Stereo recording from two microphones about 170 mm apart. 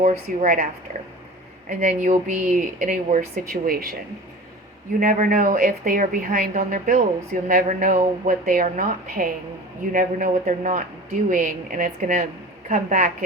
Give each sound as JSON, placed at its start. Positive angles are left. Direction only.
{"t": 0.0, "sound": "speech", "side_deg": -40}
{"t": 1.7, "sound": "speech", "side_deg": -45}
{"t": 4.9, "sound": "a woman's voice", "side_deg": -50}